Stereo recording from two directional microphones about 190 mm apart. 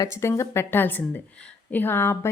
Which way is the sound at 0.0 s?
15° left (ahead or behind).